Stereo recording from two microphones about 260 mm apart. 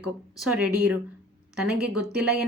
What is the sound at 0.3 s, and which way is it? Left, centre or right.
Speech, centre.